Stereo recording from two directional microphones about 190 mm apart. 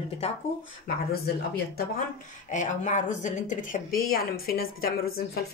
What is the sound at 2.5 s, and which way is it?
A woman's voice, 40° left (ahead or behind).